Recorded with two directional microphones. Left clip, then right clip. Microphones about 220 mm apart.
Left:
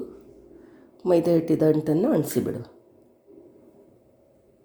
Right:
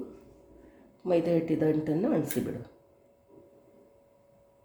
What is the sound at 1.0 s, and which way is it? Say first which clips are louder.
Speech: left 6 dB; 30° left (ahead or behind).